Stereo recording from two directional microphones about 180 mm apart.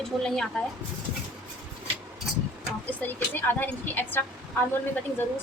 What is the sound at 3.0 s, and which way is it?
A woman's voice, 10° left (ahead or behind).